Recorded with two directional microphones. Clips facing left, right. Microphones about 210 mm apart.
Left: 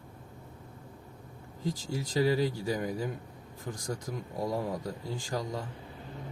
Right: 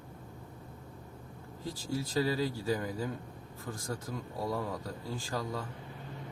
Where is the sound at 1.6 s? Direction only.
15° left (ahead or behind).